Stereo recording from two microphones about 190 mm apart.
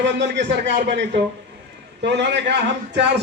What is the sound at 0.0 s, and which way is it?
A man's voice, 65° right (ahead or behind).